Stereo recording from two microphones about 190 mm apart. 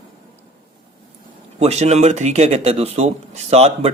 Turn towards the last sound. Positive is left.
turn(degrees=-35)  # may be behind; listen again after turning